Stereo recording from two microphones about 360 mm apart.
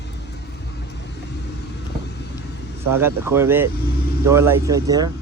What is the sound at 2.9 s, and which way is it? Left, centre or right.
Speech, centre.